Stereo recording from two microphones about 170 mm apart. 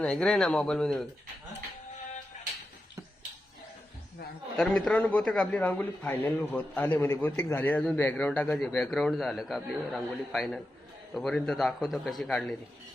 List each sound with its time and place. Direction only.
0.0 s a man's voice: 5° left (ahead or behind)
2.3 s music: 45° left (ahead or behind)
4.5 s a man's voice: 5° left (ahead or behind)